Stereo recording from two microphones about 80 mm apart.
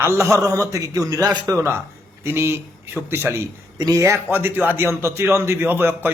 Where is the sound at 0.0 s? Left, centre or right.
Right.